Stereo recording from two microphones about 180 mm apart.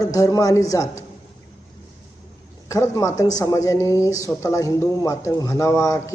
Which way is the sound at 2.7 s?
15° left (ahead or behind).